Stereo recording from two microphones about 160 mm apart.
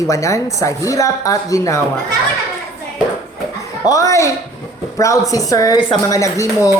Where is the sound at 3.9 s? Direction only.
20° left (ahead or behind).